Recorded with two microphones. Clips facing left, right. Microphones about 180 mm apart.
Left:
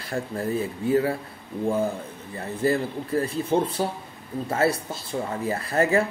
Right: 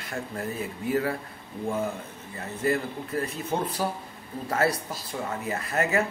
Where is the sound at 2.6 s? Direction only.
30° left (ahead or behind).